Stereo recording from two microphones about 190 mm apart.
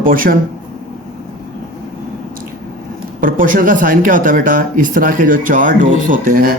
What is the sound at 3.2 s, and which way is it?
Speech, 45° right (ahead or behind).